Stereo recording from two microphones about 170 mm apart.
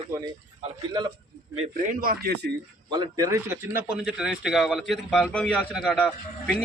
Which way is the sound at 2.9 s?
20° right (ahead or behind).